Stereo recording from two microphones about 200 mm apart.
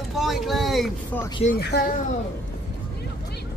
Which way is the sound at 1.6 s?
55° left (ahead or behind).